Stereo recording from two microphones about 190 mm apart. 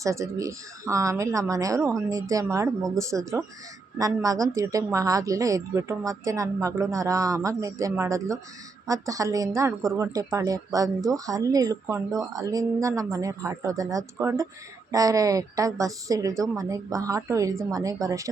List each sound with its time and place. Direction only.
0.0 s a woman's voice: 15° right (ahead or behind)